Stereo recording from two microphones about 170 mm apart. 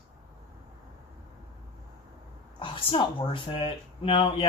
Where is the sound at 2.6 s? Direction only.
30° left (ahead or behind).